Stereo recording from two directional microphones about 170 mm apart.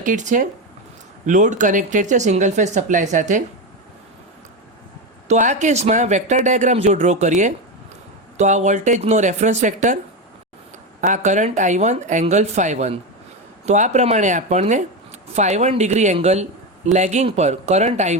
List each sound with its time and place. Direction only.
0.0 s speech: 50° right (ahead or behind)
5.3 s speech: 45° right (ahead or behind)
11.0 s speech: 45° right (ahead or behind)